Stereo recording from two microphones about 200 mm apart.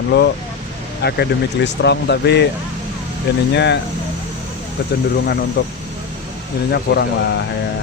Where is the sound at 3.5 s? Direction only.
60° left (ahead or behind).